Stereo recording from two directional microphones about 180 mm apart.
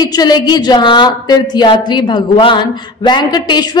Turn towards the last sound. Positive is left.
turn(degrees=25)  # may be behind; listen again after turning